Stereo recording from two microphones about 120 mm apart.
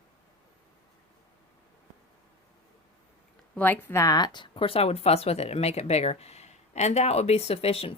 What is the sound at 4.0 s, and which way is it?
Speech, 30° left (ahead or behind).